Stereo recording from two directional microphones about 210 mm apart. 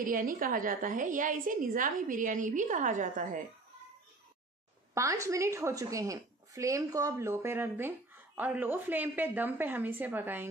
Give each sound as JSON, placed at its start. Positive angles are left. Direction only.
{"t": 0.0, "sound": "a woman's voice", "side_deg": -40}
{"t": 4.9, "sound": "a woman's voice", "side_deg": -15}